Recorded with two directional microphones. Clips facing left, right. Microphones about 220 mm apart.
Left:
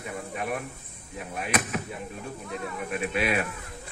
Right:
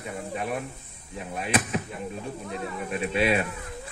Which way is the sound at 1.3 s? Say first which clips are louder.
Right 2 dB; 30° right (ahead or behind).